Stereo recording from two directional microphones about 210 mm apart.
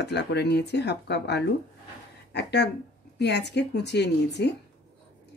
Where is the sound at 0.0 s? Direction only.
55° left (ahead or behind).